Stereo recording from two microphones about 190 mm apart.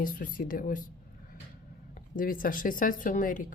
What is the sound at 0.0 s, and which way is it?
Speech, 45° left (ahead or behind).